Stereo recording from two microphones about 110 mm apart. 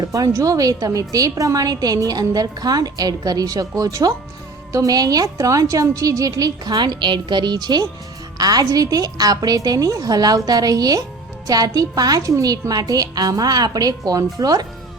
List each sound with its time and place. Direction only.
0.0 s a woman's voice: 30° right (ahead or behind)